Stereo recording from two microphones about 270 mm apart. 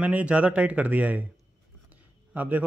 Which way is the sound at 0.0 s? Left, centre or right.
Centre.